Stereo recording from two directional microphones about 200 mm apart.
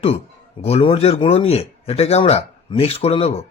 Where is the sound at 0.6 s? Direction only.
30° left (ahead or behind).